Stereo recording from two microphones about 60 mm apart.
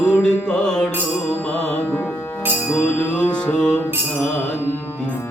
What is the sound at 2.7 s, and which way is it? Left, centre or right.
Music, centre.